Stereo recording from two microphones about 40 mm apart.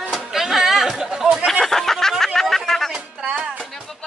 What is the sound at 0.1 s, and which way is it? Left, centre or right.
Chatter, centre.